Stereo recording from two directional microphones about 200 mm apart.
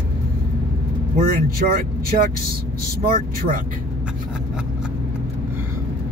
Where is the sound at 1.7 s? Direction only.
45° right (ahead or behind).